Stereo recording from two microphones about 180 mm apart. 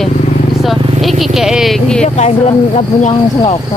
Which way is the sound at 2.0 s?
40° left (ahead or behind).